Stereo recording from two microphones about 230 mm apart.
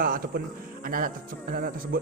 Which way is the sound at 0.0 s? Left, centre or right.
Right.